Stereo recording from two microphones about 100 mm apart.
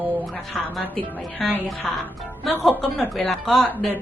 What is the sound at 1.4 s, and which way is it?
Music, 5° left (ahead or behind).